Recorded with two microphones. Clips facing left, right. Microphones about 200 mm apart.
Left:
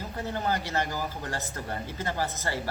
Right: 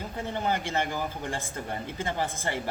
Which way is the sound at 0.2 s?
20° right (ahead or behind).